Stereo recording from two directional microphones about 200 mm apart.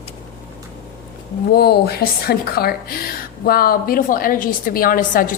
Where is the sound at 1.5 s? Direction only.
50° left (ahead or behind).